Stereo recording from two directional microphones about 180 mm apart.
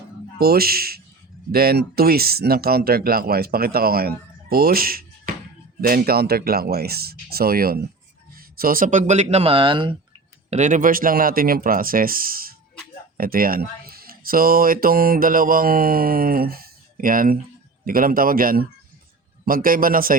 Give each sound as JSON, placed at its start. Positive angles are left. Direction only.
{"t": 0.3, "sound": "speech", "side_deg": -55}
{"t": 10.5, "sound": "speech", "side_deg": -45}